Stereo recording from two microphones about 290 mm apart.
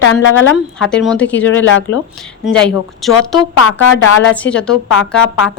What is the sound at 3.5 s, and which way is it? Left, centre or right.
Speech, left.